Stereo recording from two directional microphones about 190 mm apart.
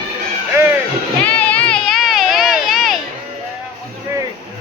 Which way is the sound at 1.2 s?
5° left (ahead or behind).